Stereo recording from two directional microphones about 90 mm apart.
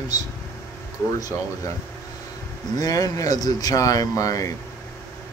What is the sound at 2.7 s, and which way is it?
Speech, 45° left (ahead or behind).